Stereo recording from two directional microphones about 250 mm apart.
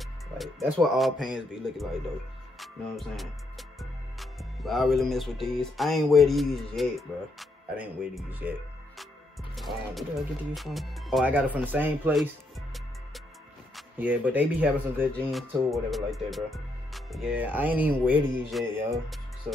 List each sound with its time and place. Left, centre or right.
0.0 s music: centre
2.6 s speech: centre
4.2 s music: centre
13.7 s speech: centre
15.1 s music: centre